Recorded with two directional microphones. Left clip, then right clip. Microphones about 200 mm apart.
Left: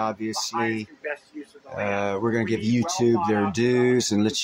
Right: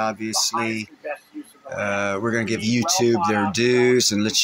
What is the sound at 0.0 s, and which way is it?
Speech, 15° left (ahead or behind).